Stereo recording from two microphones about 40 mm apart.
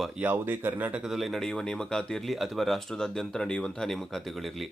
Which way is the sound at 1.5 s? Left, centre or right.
Centre.